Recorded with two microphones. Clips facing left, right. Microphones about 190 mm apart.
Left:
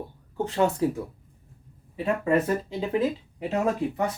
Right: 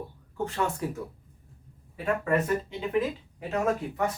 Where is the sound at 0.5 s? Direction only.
25° left (ahead or behind).